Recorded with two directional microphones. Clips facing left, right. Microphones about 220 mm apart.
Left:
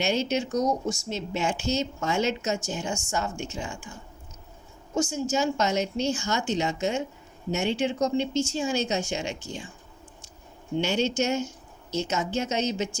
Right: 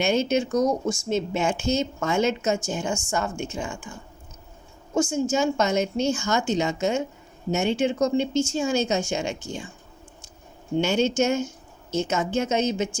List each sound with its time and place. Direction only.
0.0 s a woman's voice: 50° right (ahead or behind)
4.9 s a woman's voice: 50° right (ahead or behind)
10.8 s a woman's voice: 50° right (ahead or behind)